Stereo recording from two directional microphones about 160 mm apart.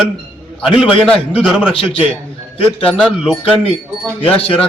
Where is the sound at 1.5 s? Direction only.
5° right (ahead or behind).